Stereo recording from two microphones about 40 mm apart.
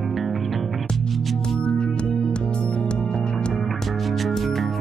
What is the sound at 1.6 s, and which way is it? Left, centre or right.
Music, left.